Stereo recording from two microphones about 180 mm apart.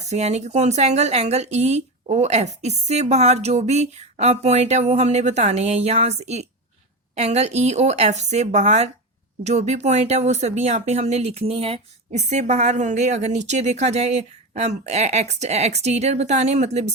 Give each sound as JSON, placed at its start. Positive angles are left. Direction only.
{"t": 0.0, "sound": "speech", "side_deg": -40}